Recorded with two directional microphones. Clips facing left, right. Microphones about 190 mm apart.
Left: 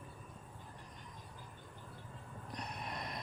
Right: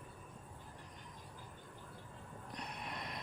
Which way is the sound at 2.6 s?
40° left (ahead or behind).